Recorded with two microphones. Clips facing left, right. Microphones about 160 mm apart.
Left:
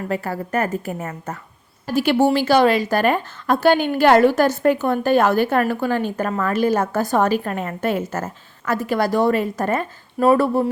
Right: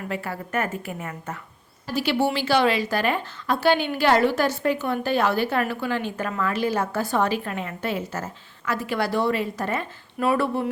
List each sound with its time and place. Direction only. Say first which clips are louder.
0.1 s a woman's voice: left 5 dB; 40° left (ahead or behind)